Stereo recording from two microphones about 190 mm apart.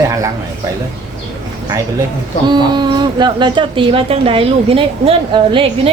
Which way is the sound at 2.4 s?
25° right (ahead or behind).